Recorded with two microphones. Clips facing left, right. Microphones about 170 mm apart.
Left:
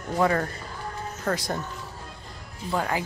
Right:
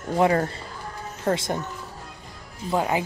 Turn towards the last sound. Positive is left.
turn(degrees=-20)  # may be behind; listen again after turning